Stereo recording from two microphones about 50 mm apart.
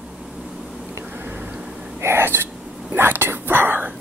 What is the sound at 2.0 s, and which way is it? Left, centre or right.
Whispering, right.